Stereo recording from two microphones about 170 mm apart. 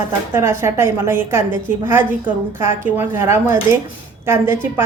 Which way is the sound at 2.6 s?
15° right (ahead or behind).